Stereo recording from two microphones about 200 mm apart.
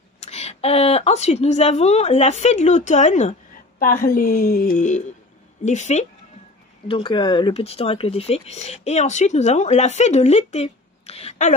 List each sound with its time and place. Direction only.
0.2 s speech: 35° left (ahead or behind)
3.8 s a woman's voice: 45° left (ahead or behind)